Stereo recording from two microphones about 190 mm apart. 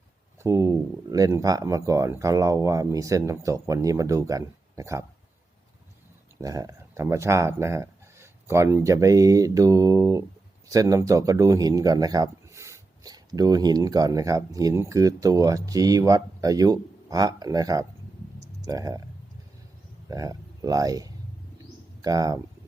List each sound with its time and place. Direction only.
0.4 s speech: 15° right (ahead or behind)
6.4 s speech: 20° right (ahead or behind)
20.1 s speech: 15° right (ahead or behind)